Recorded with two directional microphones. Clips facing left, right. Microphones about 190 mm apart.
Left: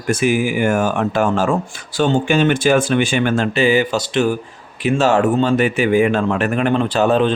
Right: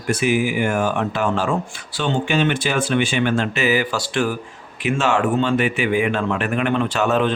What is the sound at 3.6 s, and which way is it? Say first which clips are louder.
Speech: left 4 dB; 25° left (ahead or behind).